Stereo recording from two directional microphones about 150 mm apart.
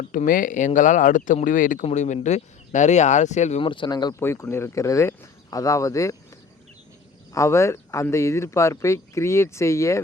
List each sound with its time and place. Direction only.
0.0 s speech: 60° left (ahead or behind)
1.8 s speech: 50° left (ahead or behind)
3.6 s speech: 35° left (ahead or behind)
4.2 s speech: 15° left (ahead or behind)
7.3 s speech: 20° left (ahead or behind)